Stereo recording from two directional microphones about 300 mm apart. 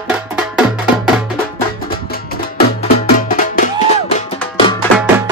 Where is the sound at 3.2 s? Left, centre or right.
Left.